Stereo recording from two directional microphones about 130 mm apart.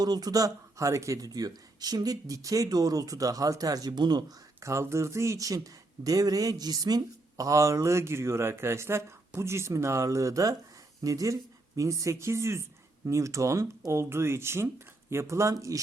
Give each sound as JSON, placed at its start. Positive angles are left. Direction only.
{"t": 0.0, "sound": "speech", "side_deg": -30}
{"t": 4.6, "sound": "speech", "side_deg": -20}